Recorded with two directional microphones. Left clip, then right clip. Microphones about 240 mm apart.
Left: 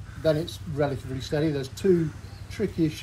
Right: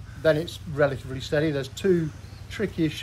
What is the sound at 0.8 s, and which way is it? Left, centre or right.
Speech, centre.